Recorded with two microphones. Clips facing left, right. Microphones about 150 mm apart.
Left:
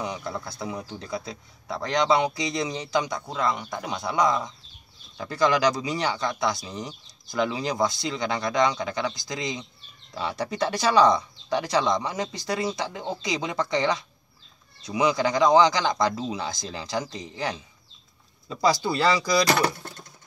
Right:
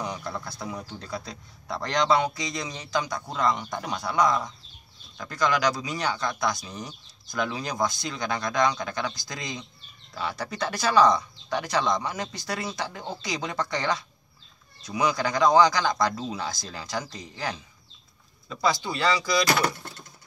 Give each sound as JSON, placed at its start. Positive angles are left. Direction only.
{"t": 0.0, "sound": "a man's voice", "side_deg": 15}
{"t": 3.2, "sound": "a man's voice", "side_deg": 10}
{"t": 5.1, "sound": "speech", "side_deg": 30}
{"t": 18.5, "sound": "speech", "side_deg": 35}